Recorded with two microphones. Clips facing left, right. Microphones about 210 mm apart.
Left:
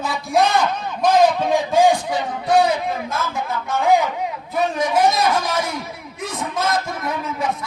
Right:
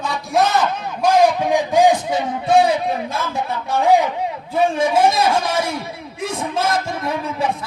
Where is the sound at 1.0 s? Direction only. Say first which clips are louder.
Right 1 dB; 15° right (ahead or behind).